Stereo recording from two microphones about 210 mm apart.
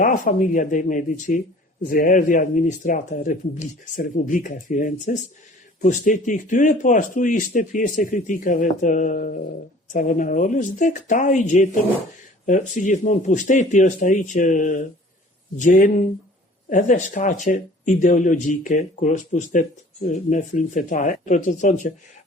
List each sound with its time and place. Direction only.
0.0 s speech: 40° left (ahead or behind)